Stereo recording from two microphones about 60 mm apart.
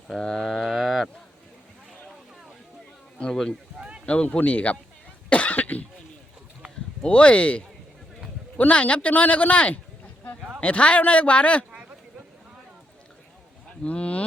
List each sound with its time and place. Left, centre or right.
0.1 s a sound: centre
3.2 s speech: centre
3.8 s run: centre
4.0 s a man's voice: left
5.3 s cough: left
7.0 s a man's voice: left
13.8 s a sound: left